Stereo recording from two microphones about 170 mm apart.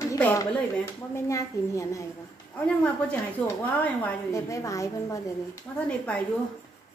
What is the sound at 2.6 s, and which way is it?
A woman's voice, 5° left (ahead or behind).